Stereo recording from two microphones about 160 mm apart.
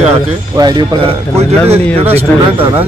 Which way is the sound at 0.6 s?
25° right (ahead or behind).